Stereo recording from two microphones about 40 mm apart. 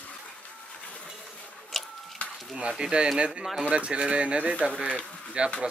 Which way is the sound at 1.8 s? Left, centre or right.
Centre.